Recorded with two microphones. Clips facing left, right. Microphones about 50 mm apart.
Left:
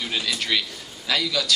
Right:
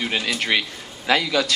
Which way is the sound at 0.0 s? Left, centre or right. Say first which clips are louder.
Right 3 dB; right.